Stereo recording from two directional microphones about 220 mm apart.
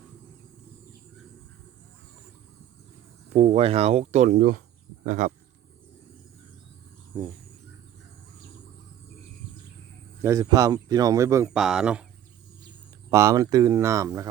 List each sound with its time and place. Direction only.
3.3 s speech: 30° right (ahead or behind)
10.2 s speech: 15° right (ahead or behind)
11.4 s speech: 5° right (ahead or behind)
13.1 s speech: 15° right (ahead or behind)